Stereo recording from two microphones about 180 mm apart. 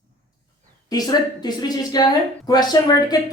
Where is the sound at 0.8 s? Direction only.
20° left (ahead or behind).